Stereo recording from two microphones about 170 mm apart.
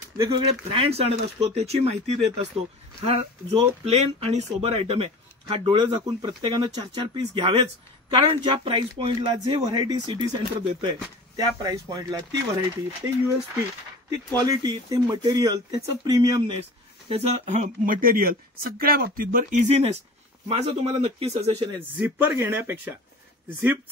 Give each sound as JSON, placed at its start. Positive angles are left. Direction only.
{"t": 0.2, "sound": "speech", "side_deg": -35}
{"t": 14.3, "sound": "speech", "side_deg": -25}
{"t": 17.1, "sound": "speech", "side_deg": -45}
{"t": 21.9, "sound": "speech", "side_deg": -10}